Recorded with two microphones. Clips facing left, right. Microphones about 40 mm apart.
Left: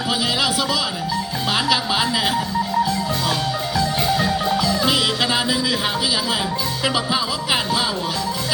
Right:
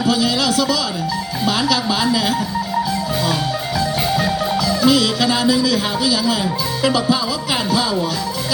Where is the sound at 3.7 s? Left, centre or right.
Centre.